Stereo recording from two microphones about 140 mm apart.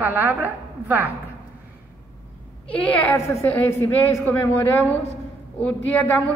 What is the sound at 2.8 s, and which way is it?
A woman's voice, 15° left (ahead or behind).